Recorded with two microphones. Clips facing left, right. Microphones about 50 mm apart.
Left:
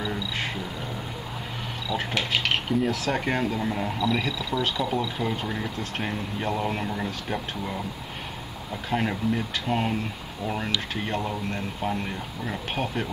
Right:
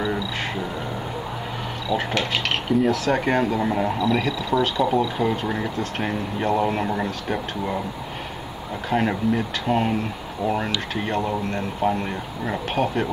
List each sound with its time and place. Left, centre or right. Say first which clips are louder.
1.9 s speech: right 4 dB; centre
7.2 s speech: right 5 dB; right
8.9 s speech: right 4 dB; centre
10.4 s speech: right 6 dB; centre
10.7 s speech: right 3 dB; centre